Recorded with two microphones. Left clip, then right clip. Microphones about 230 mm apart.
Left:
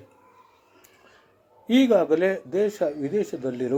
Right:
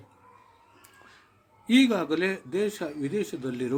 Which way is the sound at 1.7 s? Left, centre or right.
Right.